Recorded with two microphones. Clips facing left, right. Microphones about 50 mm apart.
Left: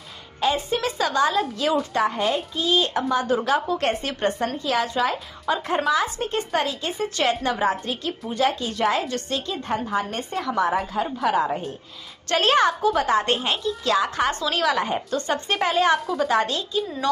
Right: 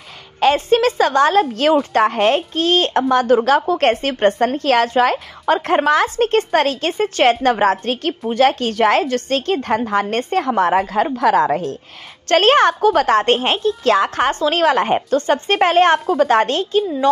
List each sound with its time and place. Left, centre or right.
0.4 s a woman's voice: right
2.0 s a woman's voice: right
4.6 s a woman's voice: right
9.0 s a woman's voice: right
11.1 s a woman's voice: right
12.3 s a woman's voice: right
12.6 s a woman's voice: right
14.4 s a woman's voice: right